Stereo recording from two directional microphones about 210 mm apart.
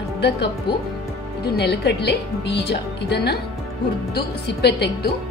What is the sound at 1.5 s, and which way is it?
A woman's voice, 50° left (ahead or behind).